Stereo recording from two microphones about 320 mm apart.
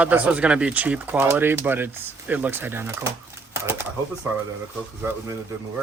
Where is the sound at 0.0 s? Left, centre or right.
Centre.